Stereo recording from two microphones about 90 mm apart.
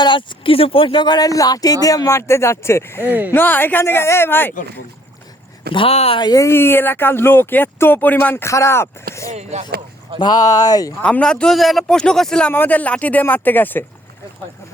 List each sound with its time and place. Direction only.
0.0 s speech: 60° left (ahead or behind); by 1.0 s 80° left
1.0 s speech: 45° left (ahead or behind); by 3.1 s 25° left (ahead or behind)
3.1 s speech: 20° right (ahead or behind)
3.3 s speech: 20° left (ahead or behind)
5.7 s speech: 70° left (ahead or behind)
6.2 s speech: 40° left (ahead or behind)
6.5 s speech: 25° left (ahead or behind)
8.4 s speech: 35° left (ahead or behind)
10.2 s speech: 50° left (ahead or behind)
11.0 s a man's voice: 10° left (ahead or behind)